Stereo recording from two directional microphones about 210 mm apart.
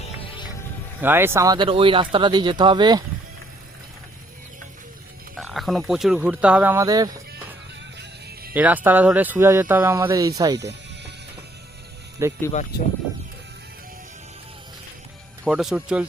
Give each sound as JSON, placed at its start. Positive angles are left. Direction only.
{"t": 0.0, "sound": "music", "side_deg": 25}
{"t": 1.0, "sound": "speech", "side_deg": -10}
{"t": 5.4, "sound": "speech", "side_deg": 0}
{"t": 8.5, "sound": "speech", "side_deg": -10}
{"t": 10.6, "sound": "music", "side_deg": -55}
{"t": 12.2, "sound": "speech", "side_deg": -10}
{"t": 15.4, "sound": "speech", "side_deg": 0}